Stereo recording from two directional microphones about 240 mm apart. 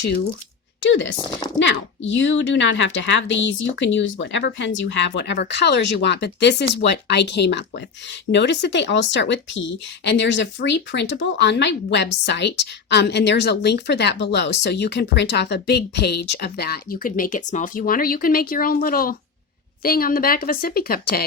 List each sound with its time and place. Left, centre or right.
0.8 s a woman's voice: left
1.2 s speech: centre
1.5 s a woman's voice: left